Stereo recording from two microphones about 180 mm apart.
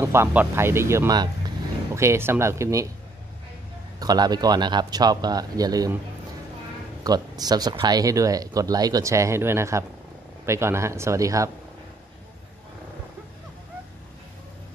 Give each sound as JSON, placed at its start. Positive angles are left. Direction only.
{"t": 0.0, "sound": "speech", "side_deg": -15}
{"t": 4.0, "sound": "speech", "side_deg": -20}
{"t": 7.0, "sound": "speech", "side_deg": -20}